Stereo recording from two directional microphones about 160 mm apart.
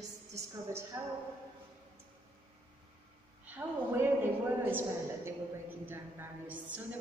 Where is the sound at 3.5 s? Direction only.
10° right (ahead or behind).